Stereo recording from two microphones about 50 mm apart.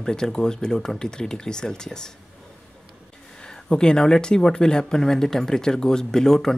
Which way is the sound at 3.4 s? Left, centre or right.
Centre.